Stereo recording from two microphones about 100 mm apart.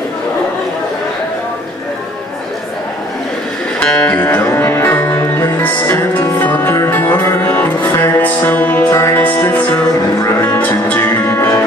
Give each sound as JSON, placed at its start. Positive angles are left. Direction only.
{"t": 3.8, "sound": "music", "side_deg": 15}